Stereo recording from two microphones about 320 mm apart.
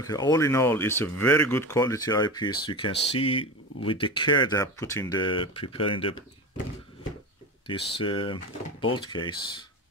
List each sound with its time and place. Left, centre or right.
0.0 s speech: centre
7.6 s speech: centre